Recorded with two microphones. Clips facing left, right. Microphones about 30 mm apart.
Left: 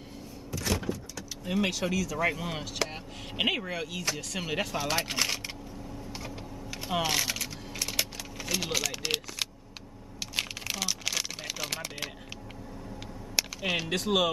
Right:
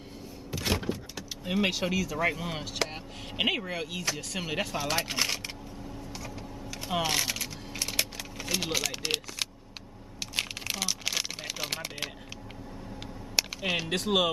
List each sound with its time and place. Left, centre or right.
0.5 s power windows: right
1.4 s speech: centre
2.2 s speech: centre
6.1 s mechanisms: centre
6.9 s typing: centre
10.3 s a sound: centre
13.4 s speech: centre